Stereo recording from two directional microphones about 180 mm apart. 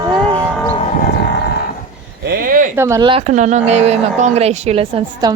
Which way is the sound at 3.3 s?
40° right (ahead or behind).